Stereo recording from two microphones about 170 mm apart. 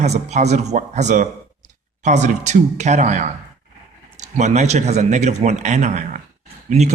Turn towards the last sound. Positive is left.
turn(degrees=-40)  # may be behind; listen again after turning